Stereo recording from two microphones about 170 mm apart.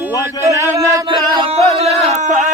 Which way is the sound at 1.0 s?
35° right (ahead or behind).